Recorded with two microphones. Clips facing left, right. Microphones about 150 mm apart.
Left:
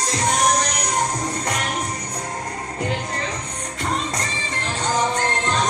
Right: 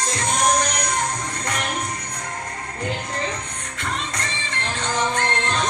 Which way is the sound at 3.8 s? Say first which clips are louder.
Left 4 dB; 40° left (ahead or behind).